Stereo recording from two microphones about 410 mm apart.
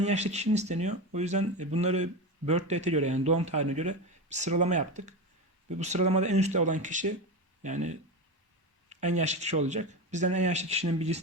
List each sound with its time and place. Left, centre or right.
0.0 s speech: centre